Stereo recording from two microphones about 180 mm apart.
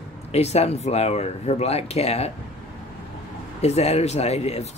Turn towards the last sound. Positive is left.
turn(degrees=35)  # may be behind; listen again after turning